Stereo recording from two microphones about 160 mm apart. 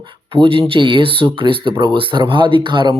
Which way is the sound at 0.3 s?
35° right (ahead or behind).